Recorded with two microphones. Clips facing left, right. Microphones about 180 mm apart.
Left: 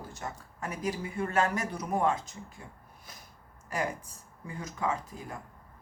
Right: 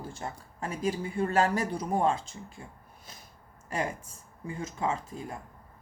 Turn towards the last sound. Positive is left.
turn(degrees=-25)  # may be behind; listen again after turning